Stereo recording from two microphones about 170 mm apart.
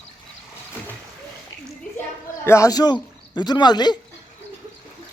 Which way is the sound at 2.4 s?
15° left (ahead or behind).